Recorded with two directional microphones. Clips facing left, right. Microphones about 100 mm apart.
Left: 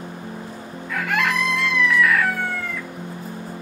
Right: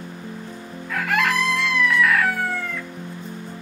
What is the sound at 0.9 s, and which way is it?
Chicken, centre (ahead or behind).